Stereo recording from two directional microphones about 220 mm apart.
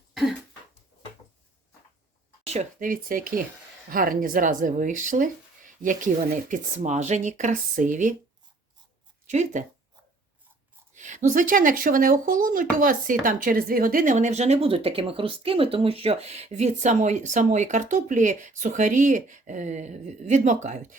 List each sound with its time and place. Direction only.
0.1 s cough: centre (ahead or behind)
2.5 s speech: 35° right (ahead or behind)
9.2 s speech: 35° right (ahead or behind)
10.9 s speech: 35° right (ahead or behind)